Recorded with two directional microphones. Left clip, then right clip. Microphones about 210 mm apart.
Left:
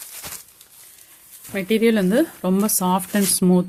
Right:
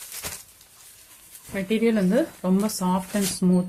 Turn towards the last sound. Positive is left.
turn(degrees=40)  # may be behind; listen again after turning